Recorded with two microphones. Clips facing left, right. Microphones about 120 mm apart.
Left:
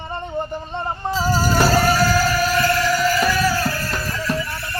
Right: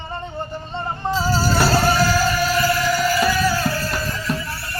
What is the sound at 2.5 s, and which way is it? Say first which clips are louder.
Music: left 1 dB; 5° right (ahead or behind).